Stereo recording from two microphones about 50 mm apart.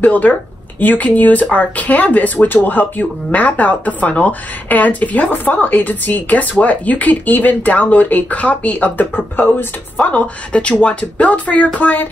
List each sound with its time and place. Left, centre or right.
0.0 s speech: left